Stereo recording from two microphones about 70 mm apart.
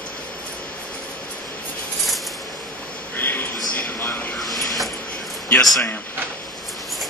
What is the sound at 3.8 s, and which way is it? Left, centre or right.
Vehicle, left.